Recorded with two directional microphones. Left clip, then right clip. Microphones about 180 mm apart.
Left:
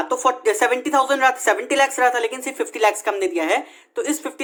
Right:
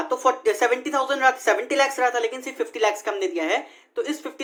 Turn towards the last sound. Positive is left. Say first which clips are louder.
# left 3 dB
turn(degrees=35)  # may be behind; listen again after turning